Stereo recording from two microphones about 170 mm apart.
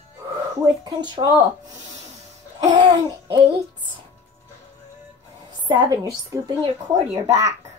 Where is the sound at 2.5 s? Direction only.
25° right (ahead or behind).